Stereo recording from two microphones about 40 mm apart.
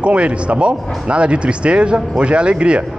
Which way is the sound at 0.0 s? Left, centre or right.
Right.